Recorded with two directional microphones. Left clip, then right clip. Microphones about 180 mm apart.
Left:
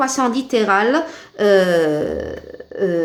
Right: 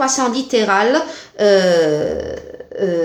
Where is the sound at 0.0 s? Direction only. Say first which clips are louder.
Right 1 dB; 40° left (ahead or behind).